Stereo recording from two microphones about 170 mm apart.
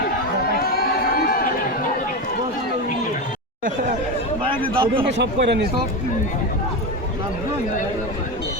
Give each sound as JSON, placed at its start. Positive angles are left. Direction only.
{"t": 0.5, "sound": "a sound", "side_deg": 60}
{"t": 4.7, "sound": "speech", "side_deg": -30}
{"t": 5.1, "sound": "speech", "side_deg": -90}